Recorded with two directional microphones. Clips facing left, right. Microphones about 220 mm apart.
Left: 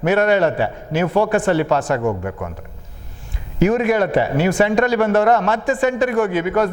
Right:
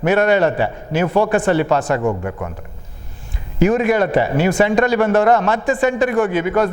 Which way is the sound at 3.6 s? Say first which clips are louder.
Right 1 dB; 15° right (ahead or behind).